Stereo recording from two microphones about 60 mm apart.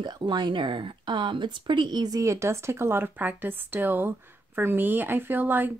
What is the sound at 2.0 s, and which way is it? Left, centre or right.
Speech, right.